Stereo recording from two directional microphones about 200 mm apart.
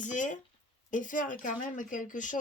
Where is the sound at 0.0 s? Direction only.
40° left (ahead or behind).